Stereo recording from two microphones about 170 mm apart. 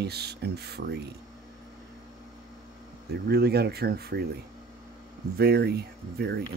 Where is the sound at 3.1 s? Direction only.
70° right (ahead or behind).